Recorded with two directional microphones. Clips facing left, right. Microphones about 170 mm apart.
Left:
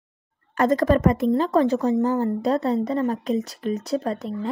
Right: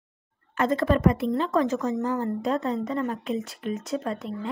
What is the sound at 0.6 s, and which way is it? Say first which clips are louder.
A woman's voice: left 4 dB; 45° left (ahead or behind).